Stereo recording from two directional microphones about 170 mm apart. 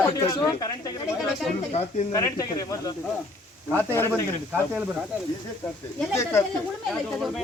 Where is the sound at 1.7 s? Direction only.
40° left (ahead or behind).